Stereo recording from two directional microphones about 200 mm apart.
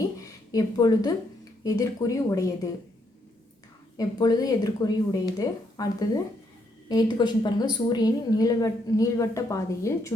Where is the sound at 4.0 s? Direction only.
20° left (ahead or behind).